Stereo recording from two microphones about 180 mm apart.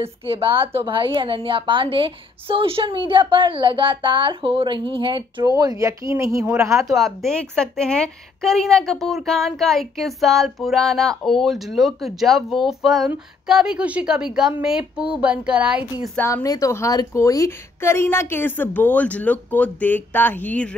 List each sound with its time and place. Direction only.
0.0 s a woman's voice: 30° right (ahead or behind)
6.9 s a woman's voice: centre (ahead or behind)
16.2 s a woman's voice: 15° left (ahead or behind)